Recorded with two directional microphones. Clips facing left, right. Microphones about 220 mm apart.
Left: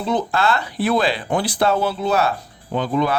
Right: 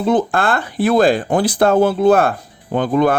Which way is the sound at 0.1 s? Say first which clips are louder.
Right 4 dB; 50° right (ahead or behind).